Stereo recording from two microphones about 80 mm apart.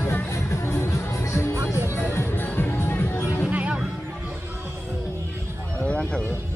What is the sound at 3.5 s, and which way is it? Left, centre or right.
Music, centre.